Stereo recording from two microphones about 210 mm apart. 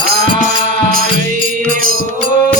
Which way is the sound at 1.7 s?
40° right (ahead or behind).